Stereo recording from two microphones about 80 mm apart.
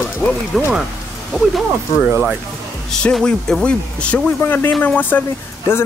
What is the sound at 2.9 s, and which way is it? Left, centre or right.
Speech, centre.